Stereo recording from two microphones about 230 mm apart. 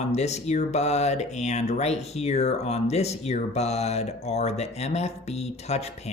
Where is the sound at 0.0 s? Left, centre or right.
Left.